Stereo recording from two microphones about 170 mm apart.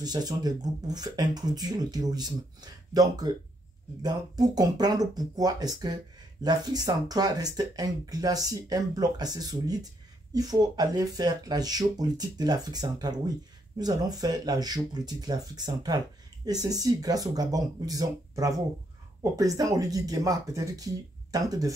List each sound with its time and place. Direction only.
0.0 s speech: 25° right (ahead or behind)